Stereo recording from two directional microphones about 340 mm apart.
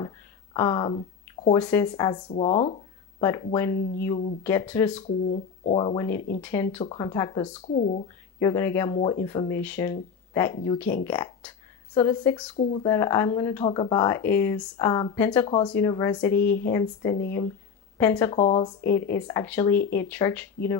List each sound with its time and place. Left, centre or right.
0.0 s a sound: centre
2.2 s speech: centre
6.1 s speech: left
6.4 s speech: centre; by 8.0 s left
8.4 s speech: centre